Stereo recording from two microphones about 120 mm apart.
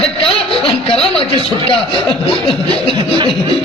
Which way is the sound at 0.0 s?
50° left (ahead or behind).